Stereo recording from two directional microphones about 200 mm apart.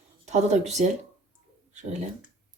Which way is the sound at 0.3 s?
35° right (ahead or behind).